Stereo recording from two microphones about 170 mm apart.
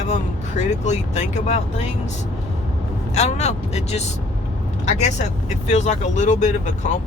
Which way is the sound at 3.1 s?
40° left (ahead or behind).